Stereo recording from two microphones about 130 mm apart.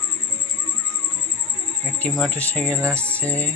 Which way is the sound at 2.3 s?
10° left (ahead or behind).